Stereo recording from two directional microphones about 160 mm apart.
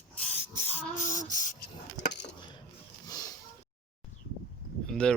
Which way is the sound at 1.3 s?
50° left (ahead or behind).